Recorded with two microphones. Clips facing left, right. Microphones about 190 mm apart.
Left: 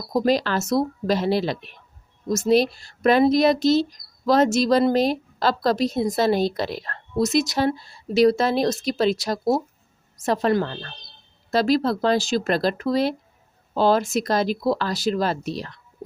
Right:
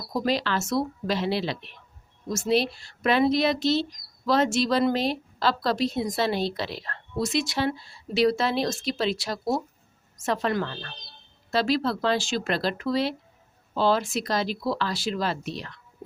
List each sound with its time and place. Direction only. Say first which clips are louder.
0.1 s a woman's voice: left 5 dB; 45° left (ahead or behind)